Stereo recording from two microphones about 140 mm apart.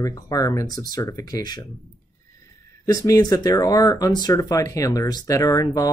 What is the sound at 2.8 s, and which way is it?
Speech, 25° left (ahead or behind).